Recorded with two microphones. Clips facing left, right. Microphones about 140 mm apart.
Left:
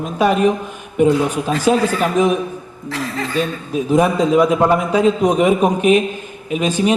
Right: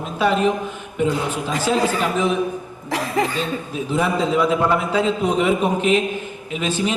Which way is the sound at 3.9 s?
15° left (ahead or behind).